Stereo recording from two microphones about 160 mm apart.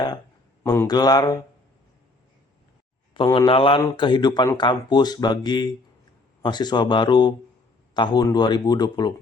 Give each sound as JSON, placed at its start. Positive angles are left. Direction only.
{"t": 0.6, "sound": "speech", "side_deg": 20}
{"t": 3.3, "sound": "speech", "side_deg": 30}